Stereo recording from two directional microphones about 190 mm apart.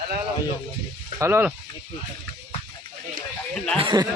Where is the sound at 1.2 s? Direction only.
10° right (ahead or behind).